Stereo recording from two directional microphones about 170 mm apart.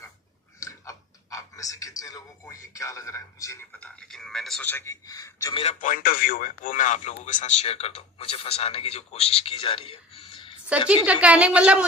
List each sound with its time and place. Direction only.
0.6 s speech: 20° left (ahead or behind)
5.6 s speech: 50° left (ahead or behind); by 10.6 s 30° left (ahead or behind)
11.0 s a woman's voice: 5° right (ahead or behind)